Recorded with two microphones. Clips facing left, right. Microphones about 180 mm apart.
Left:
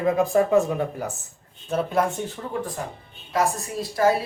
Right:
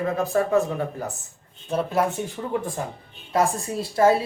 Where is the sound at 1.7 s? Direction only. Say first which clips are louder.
Even; centre (ahead or behind).